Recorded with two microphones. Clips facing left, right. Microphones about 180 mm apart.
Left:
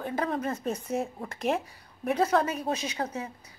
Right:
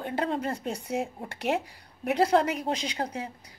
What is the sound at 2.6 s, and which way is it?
Speech, 15° right (ahead or behind).